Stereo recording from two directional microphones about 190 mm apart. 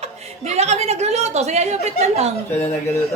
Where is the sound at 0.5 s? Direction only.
35° right (ahead or behind).